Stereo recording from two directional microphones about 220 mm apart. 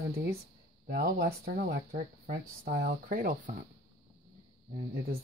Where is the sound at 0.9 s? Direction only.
45° right (ahead or behind).